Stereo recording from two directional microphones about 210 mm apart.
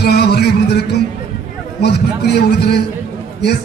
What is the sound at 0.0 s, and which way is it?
Music, 50° left (ahead or behind).